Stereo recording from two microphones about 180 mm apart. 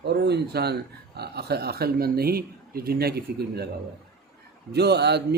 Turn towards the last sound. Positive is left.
turn(degrees=-65)  # may be behind; listen again after turning